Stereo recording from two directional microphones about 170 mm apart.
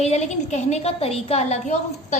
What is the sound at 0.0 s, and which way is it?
A woman's voice, 40° left (ahead or behind).